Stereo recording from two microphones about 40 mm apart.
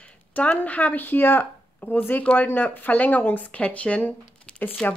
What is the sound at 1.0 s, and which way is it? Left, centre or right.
Speech, left.